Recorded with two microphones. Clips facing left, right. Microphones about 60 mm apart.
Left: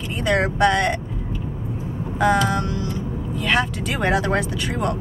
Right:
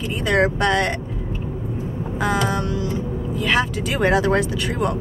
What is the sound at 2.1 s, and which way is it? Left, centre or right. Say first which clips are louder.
Speech: left 3 dB; centre.